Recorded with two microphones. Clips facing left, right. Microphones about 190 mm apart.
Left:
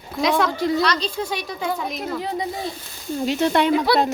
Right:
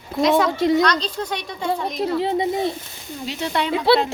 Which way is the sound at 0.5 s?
20° right (ahead or behind).